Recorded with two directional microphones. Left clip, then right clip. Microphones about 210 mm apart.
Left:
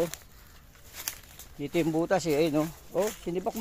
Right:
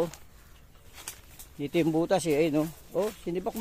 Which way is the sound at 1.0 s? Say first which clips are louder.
Left 5 dB; 45° left (ahead or behind).